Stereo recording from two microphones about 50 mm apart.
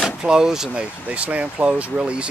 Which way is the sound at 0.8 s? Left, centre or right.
Right.